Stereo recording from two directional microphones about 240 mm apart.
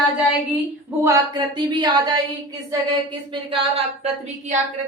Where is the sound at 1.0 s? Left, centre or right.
Centre.